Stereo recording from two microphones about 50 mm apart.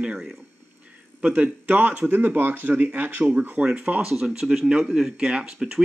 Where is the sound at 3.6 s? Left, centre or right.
Right.